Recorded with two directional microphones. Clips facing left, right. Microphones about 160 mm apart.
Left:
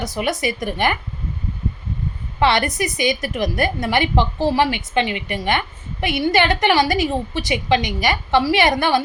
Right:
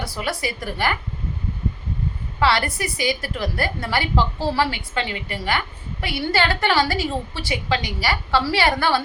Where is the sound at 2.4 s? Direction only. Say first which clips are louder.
Left 3 dB; 20° left (ahead or behind).